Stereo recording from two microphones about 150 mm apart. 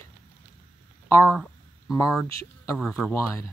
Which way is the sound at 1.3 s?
Centre (ahead or behind).